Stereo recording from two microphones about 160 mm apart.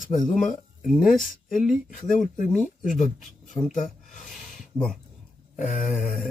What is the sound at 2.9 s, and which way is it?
Speech, centre (ahead or behind).